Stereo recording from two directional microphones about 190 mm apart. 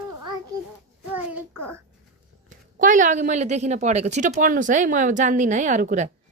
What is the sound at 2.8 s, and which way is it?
Speech, 45° right (ahead or behind).